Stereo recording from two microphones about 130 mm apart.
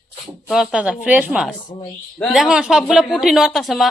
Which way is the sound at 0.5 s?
5° right (ahead or behind).